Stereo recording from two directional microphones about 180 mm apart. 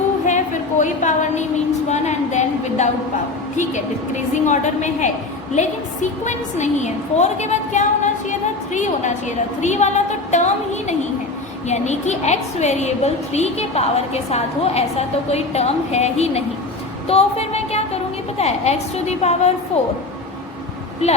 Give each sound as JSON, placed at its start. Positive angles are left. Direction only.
{"t": 0.3, "sound": "a sound", "side_deg": 45}
{"t": 4.4, "sound": "a woman's voice", "side_deg": 40}
{"t": 17.1, "sound": "music", "side_deg": 35}
{"t": 18.3, "sound": "a woman's voice", "side_deg": 35}